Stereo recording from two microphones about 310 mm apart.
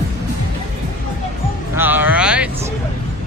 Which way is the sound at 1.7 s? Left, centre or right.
Centre.